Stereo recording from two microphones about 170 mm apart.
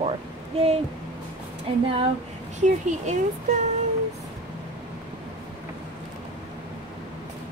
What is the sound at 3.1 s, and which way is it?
Speech, 45° right (ahead or behind).